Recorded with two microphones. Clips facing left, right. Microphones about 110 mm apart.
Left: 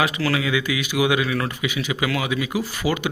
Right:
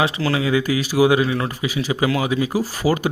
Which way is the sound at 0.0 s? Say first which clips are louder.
Right 2 dB; 30° right (ahead or behind).